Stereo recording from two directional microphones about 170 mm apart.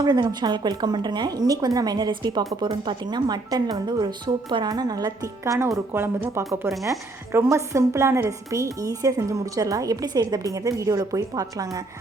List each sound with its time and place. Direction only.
0.0 s a woman's voice: 25° right (ahead or behind)